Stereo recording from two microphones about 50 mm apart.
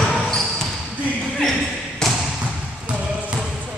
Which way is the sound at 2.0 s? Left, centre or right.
Centre.